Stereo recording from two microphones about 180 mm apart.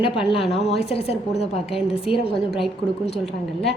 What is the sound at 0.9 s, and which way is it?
A woman's voice, 35° left (ahead or behind).